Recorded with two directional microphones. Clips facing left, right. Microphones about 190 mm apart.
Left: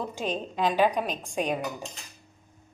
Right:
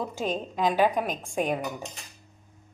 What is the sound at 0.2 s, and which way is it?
A woman's voice, 5° right (ahead or behind).